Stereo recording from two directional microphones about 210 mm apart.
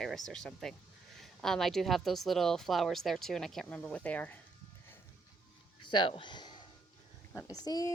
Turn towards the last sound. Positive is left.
turn(degrees=20)  # may be behind; listen again after turning